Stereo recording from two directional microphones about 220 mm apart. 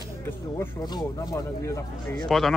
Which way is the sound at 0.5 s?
15° left (ahead or behind).